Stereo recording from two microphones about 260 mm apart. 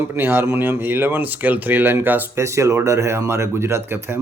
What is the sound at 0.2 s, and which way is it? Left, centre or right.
Speech, centre.